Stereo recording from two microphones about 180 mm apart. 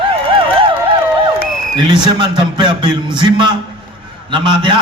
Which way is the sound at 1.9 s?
25° right (ahead or behind).